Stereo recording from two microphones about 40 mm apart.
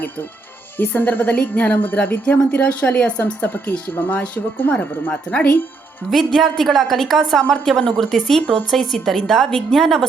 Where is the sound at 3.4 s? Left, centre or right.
Left.